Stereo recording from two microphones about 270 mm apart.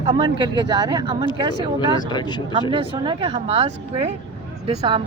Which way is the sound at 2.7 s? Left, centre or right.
Centre.